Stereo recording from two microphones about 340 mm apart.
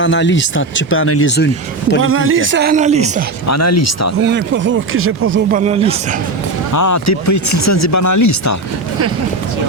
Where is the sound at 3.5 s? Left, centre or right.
Left.